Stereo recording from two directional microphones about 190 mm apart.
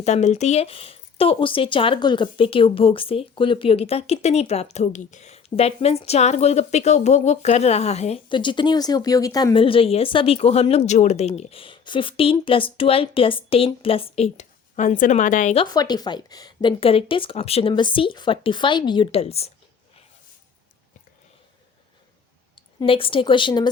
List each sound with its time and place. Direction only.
0.0 s speech: 35° left (ahead or behind)
15.5 s a woman's voice: 20° left (ahead or behind)
22.5 s a woman's voice: 30° left (ahead or behind)